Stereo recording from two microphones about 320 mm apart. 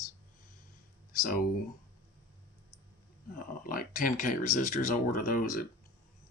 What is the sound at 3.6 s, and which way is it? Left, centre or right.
Speech, left.